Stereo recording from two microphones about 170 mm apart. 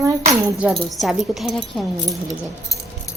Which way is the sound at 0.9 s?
Centre (ahead or behind).